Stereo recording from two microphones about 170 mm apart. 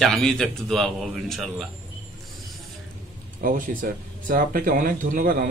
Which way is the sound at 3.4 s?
55° right (ahead or behind).